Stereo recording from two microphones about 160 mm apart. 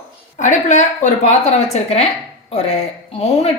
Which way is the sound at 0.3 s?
50° left (ahead or behind).